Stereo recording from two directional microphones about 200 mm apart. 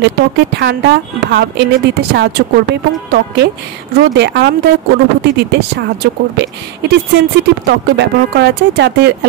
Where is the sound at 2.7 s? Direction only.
55° right (ahead or behind).